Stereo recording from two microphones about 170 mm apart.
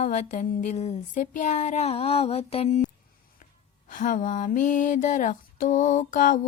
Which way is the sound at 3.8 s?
50° left (ahead or behind).